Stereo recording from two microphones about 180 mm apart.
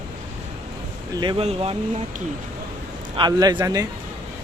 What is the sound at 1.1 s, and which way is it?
Speech, 25° right (ahead or behind).